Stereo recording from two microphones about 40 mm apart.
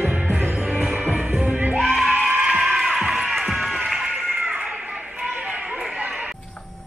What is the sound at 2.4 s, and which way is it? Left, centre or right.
Crowd, right.